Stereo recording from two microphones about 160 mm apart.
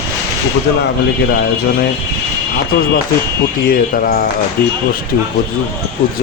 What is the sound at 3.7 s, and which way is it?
Speech, 65° left (ahead or behind).